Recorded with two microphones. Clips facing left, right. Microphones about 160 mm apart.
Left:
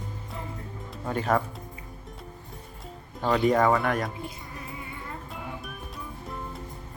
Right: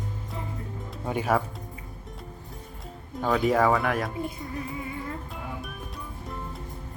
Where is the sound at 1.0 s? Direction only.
10° right (ahead or behind).